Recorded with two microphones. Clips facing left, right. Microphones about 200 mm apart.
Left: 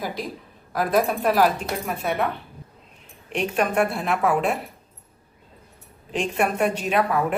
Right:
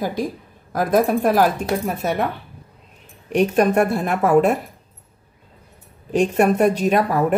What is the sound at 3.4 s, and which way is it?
A woman's voice, 40° right (ahead or behind).